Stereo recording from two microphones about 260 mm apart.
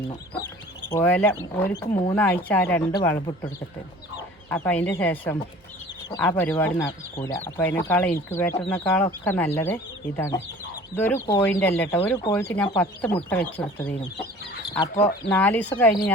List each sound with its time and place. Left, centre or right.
0.9 s speech: centre
1.9 s speech: centre
2.1 s speech: centre
4.4 s chicken: centre
4.9 s speech: centre